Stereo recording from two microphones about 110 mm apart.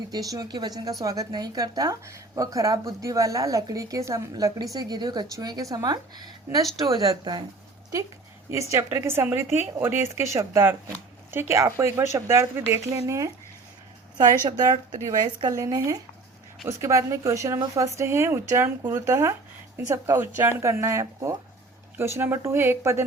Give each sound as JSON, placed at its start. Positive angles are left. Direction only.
{"t": 0.1, "sound": "a woman's voice", "side_deg": -35}
{"t": 8.7, "sound": "speech", "side_deg": -25}
{"t": 14.4, "sound": "a woman's voice", "side_deg": -40}